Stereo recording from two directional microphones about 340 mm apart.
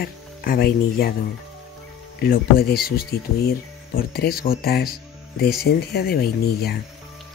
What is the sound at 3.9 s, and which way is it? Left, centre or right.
Speech, left.